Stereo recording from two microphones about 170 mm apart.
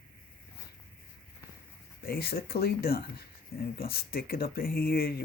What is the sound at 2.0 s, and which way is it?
Speech, 65° left (ahead or behind).